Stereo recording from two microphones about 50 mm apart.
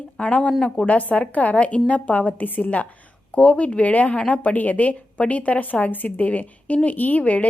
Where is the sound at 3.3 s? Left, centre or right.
Left.